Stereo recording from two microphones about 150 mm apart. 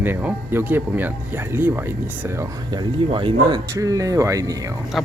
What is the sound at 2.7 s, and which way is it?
Speech, 30° right (ahead or behind).